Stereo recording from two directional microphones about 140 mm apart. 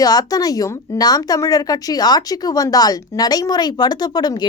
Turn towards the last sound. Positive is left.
turn(degrees=30)  # may be behind; listen again after turning